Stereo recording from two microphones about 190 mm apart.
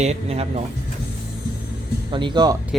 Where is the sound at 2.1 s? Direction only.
25° right (ahead or behind).